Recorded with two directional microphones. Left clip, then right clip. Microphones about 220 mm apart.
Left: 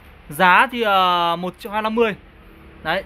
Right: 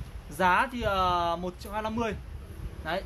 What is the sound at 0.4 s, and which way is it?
Speech, 50° left (ahead or behind).